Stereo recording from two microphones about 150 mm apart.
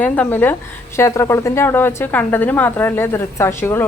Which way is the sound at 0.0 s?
10° left (ahead or behind).